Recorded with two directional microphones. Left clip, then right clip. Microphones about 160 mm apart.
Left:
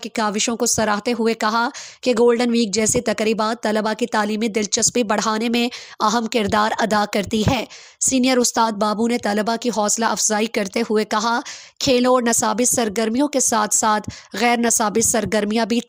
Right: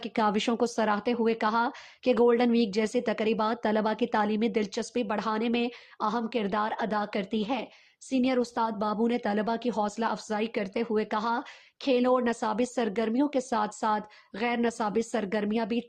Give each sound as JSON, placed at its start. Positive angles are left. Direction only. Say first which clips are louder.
{"t": 0.2, "sound": "speech", "louder": "left 5 dB", "side_deg": 25}